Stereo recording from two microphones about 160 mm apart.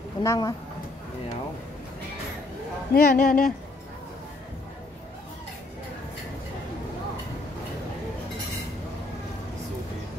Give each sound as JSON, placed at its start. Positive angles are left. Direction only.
{"t": 0.2, "sound": "speech", "side_deg": 20}
{"t": 2.9, "sound": "speech", "side_deg": 70}